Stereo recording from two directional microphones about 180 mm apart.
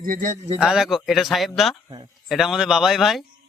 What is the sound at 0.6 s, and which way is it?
A man's voice, 5° right (ahead or behind).